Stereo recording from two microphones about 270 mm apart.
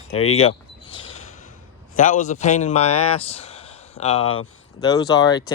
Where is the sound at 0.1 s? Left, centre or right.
Left.